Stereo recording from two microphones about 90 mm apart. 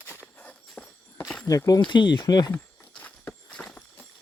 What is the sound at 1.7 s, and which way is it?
Speech, 60° left (ahead or behind).